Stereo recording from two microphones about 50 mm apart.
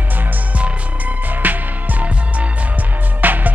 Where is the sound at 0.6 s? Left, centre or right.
Right.